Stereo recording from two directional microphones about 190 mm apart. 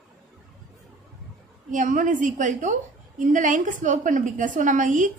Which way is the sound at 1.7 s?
40° right (ahead or behind).